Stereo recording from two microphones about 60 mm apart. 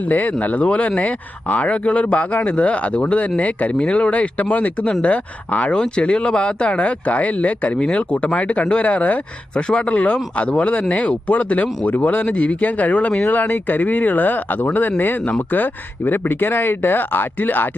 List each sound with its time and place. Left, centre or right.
0.0 s speech: left